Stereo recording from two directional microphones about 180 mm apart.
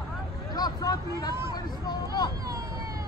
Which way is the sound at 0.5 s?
20° left (ahead or behind).